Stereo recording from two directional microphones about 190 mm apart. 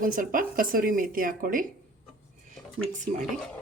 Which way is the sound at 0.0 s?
45° right (ahead or behind).